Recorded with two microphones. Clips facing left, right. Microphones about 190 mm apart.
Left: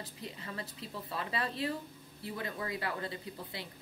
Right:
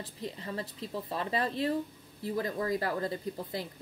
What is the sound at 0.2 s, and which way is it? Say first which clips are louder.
A woman's voice: right 7 dB; 35° right (ahead or behind).